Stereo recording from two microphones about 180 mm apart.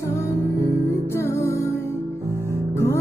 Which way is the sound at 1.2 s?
15° left (ahead or behind).